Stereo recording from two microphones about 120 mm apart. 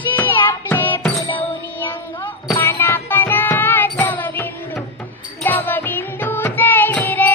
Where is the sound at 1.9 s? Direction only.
15° left (ahead or behind).